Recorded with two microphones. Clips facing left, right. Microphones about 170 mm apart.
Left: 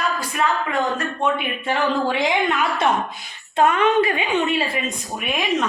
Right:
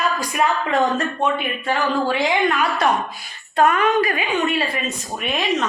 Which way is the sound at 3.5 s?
20° left (ahead or behind).